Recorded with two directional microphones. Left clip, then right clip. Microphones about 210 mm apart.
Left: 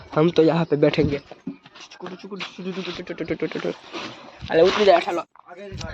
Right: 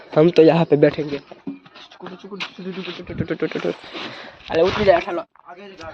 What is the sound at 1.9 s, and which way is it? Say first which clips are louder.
Speech: right 2 dB; 15° left (ahead or behind).